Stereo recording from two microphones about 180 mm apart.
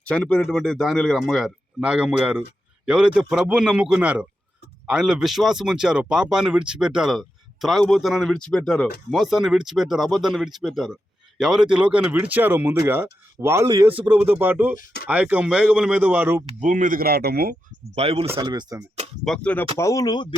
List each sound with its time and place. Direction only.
0.0 s speech: 5° left (ahead or behind); by 16.4 s 10° right (ahead or behind)
16.6 s speech: 45° right (ahead or behind)
17.9 s speech: 35° right (ahead or behind)
18.3 s speech: 25° right (ahead or behind)
19.2 s speech: 5° left (ahead or behind)
19.8 s speech: 20° left (ahead or behind)